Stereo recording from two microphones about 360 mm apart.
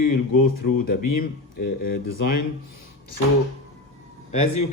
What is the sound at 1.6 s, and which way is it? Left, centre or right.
Speech, left.